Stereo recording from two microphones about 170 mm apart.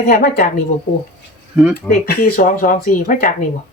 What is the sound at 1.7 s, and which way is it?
Speech, 60° left (ahead or behind).